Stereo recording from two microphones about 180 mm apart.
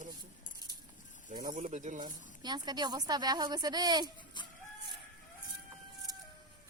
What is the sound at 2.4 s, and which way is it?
A woman's voice, 25° right (ahead or behind).